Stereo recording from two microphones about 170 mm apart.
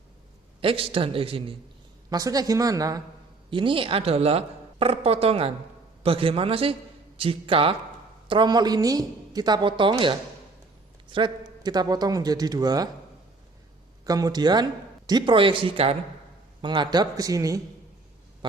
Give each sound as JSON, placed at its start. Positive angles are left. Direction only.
{"t": 0.6, "sound": "speech", "side_deg": -30}
{"t": 2.0, "sound": "speech", "side_deg": -20}
{"t": 14.0, "sound": "speech", "side_deg": -20}